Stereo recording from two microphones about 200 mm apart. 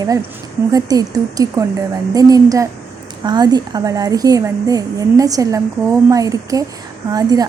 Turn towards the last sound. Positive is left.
turn(degrees=-20)  # may be behind; listen again after turning